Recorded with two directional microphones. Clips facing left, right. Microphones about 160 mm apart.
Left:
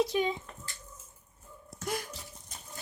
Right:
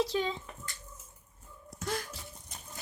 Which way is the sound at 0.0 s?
15° left (ahead or behind).